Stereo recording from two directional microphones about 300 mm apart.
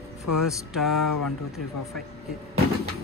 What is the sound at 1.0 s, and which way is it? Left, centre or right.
Speech, left.